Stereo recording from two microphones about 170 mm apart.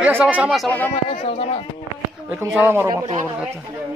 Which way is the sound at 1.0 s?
35° left (ahead or behind).